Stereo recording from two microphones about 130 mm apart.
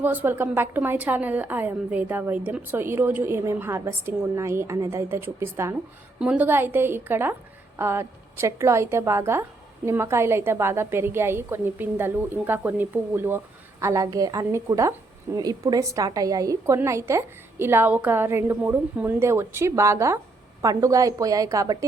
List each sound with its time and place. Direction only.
0.0 s a woman's voice: 15° right (ahead or behind)